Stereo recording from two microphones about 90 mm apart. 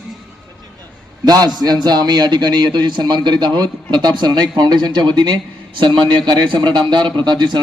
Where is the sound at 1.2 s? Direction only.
45° right (ahead or behind).